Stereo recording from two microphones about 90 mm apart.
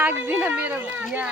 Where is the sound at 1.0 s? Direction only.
10° right (ahead or behind).